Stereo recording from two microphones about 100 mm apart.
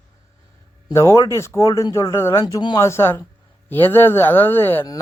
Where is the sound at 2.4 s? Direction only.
45° left (ahead or behind).